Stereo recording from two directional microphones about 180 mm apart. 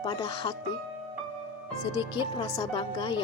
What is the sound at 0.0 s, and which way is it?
Speech, 25° left (ahead or behind).